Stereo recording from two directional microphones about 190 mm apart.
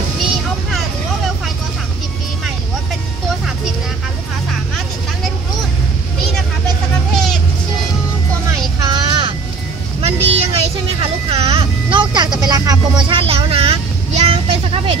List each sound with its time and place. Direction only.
0.2 s vehicle: centre (ahead or behind)
8.7 s a sound: 20° right (ahead or behind)
10.0 s vehicle: 30° right (ahead or behind)